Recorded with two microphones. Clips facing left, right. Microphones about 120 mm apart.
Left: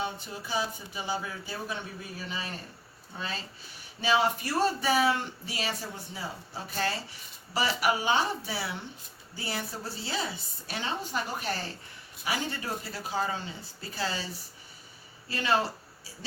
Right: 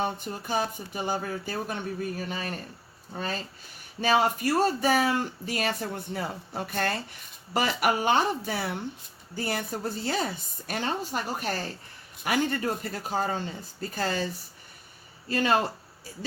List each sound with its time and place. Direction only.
0.0 s speech: 50° right (ahead or behind)
15.3 s speech: 45° right (ahead or behind)